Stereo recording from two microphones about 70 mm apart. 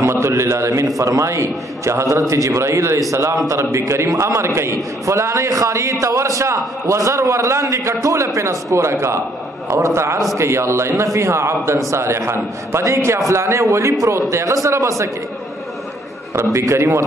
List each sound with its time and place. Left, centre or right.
0.0 s a man's voice: right
16.3 s a man's voice: right